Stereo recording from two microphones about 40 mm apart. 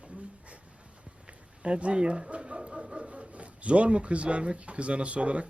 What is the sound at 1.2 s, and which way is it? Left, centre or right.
Speech, right.